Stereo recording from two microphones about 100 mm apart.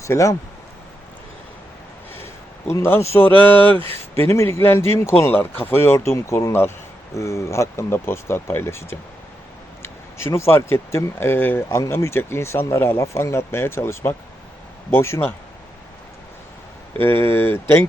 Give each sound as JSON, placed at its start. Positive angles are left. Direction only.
{"t": 0.0, "sound": "speech", "side_deg": 30}
{"t": 2.7, "sound": "speech", "side_deg": 30}
{"t": 17.0, "sound": "speech", "side_deg": 25}